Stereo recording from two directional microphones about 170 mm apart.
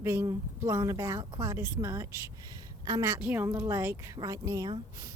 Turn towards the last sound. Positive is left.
turn(degrees=-20)  # may be behind; listen again after turning